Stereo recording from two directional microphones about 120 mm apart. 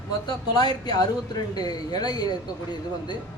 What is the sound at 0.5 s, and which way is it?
Speech, 35° left (ahead or behind).